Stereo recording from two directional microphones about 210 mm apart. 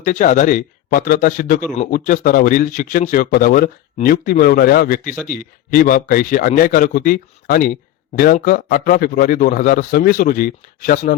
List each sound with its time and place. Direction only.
0.0 s a man's voice: 35° left (ahead or behind)